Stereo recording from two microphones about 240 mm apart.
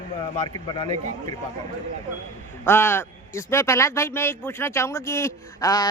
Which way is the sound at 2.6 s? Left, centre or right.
Centre.